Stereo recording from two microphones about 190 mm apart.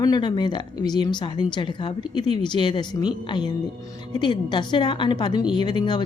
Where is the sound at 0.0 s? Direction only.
20° left (ahead or behind).